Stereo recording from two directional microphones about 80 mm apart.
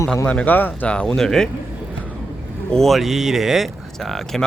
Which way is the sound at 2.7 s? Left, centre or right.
Centre.